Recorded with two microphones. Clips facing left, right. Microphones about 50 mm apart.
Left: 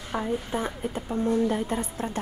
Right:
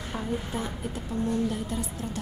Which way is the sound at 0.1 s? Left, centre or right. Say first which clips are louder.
Left 4 dB; left.